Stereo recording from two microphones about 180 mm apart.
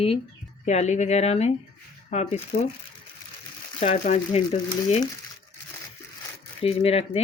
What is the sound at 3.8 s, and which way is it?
Speech, 35° left (ahead or behind).